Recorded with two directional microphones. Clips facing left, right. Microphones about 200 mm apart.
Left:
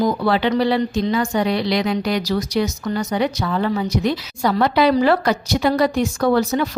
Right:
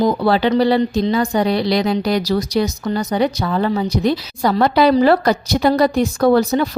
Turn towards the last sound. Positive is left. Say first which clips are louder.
# right 3 dB
turn(degrees=-35)  # may be behind; listen again after turning